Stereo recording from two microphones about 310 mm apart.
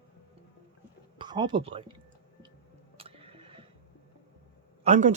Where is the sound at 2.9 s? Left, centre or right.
Centre.